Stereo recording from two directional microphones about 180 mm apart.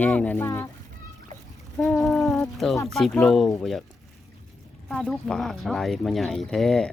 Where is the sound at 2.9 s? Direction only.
Centre (ahead or behind).